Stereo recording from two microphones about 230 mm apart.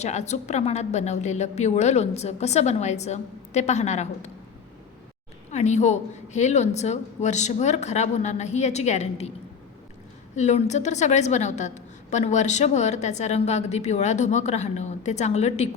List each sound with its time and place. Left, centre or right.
0.0 s a woman's voice: left
5.5 s a woman's voice: left
10.3 s a woman's voice: left